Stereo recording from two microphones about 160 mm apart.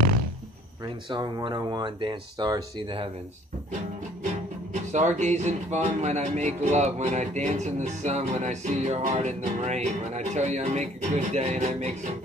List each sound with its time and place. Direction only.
1.1 s speech: 25° right (ahead or behind)
4.9 s speech: 50° right (ahead or behind)